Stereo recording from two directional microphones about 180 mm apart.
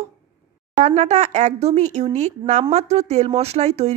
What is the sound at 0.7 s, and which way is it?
A woman's voice, 40° right (ahead or behind).